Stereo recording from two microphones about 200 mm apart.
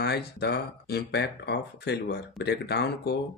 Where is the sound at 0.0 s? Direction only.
55° left (ahead or behind).